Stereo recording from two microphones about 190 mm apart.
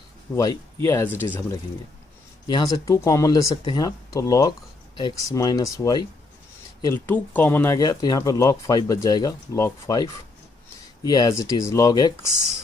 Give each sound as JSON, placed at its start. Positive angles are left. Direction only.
{"t": 0.3, "sound": "speech", "side_deg": 15}